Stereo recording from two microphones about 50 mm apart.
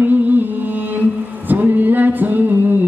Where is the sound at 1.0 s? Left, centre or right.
Right.